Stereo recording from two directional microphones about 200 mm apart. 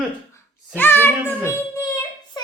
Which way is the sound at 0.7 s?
10° left (ahead or behind).